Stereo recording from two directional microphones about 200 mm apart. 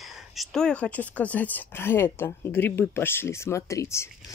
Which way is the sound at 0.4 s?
Centre (ahead or behind).